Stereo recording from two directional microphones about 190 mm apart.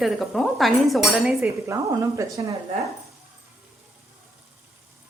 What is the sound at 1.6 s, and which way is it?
Speech, 15° right (ahead or behind).